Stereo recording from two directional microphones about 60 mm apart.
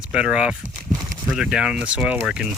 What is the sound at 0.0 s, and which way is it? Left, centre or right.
Speech, centre.